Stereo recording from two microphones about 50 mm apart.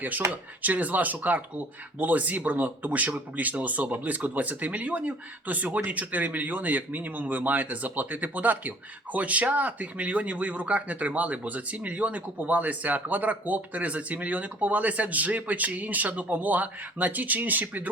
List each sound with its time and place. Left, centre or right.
0.6 s speech: right